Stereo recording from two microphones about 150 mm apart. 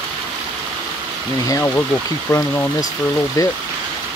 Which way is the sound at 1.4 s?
20° left (ahead or behind).